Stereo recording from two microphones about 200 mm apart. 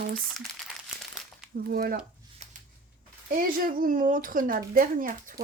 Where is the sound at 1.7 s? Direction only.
45° right (ahead or behind).